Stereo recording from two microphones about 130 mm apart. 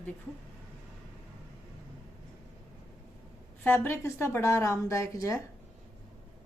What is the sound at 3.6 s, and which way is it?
A woman's voice, 15° left (ahead or behind).